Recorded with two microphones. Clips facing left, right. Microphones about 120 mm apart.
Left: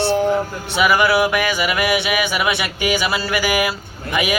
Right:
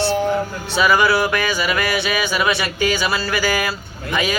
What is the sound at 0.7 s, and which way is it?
Speech, 15° left (ahead or behind).